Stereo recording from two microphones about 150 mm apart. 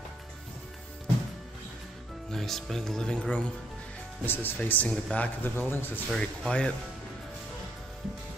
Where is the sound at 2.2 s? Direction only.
Centre (ahead or behind).